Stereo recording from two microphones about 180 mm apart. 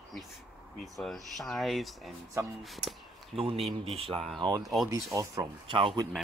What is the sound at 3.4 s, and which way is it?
Speech, 30° right (ahead or behind).